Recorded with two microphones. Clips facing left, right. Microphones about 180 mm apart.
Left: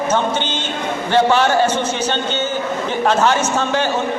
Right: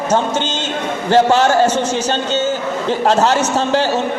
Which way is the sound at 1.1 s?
45° right (ahead or behind).